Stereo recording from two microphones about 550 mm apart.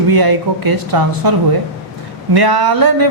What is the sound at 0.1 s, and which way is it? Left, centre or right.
A woman's voice, right.